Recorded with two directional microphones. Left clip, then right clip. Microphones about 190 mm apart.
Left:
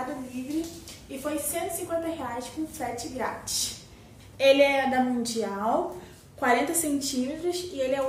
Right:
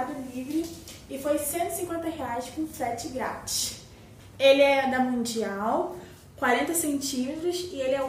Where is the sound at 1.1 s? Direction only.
10° left (ahead or behind).